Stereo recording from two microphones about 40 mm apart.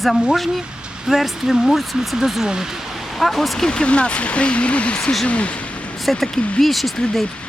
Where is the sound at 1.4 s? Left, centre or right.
Centre.